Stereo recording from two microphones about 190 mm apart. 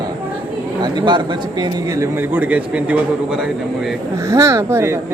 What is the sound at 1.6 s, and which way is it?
A woman's voice, 10° right (ahead or behind).